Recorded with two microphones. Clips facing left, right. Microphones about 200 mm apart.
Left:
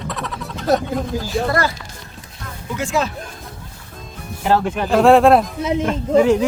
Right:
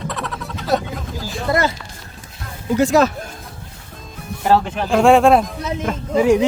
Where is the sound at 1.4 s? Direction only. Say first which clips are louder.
Right 4 dB; 20° right (ahead or behind).